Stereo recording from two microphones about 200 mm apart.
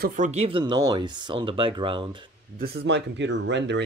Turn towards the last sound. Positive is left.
turn(degrees=-60)  # may be behind; listen again after turning